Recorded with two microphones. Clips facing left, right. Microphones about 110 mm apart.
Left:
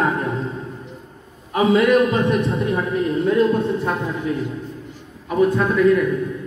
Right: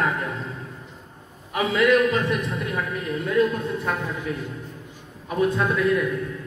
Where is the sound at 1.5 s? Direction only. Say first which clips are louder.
Left 4 dB; 30° left (ahead or behind).